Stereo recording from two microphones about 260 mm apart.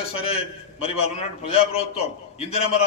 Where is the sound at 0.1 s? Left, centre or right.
Left.